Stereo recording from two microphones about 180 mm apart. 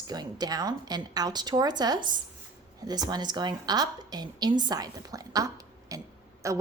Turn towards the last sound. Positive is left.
turn(degrees=-15)  # may be behind; listen again after turning